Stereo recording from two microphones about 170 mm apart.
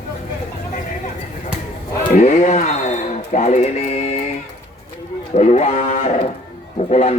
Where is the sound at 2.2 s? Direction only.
45° left (ahead or behind).